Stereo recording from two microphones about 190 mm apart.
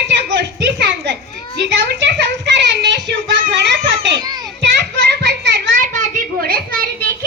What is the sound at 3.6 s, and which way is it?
Children playing, 65° right (ahead or behind).